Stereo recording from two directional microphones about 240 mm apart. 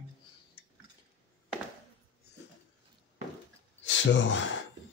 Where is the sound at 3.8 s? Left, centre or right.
Left.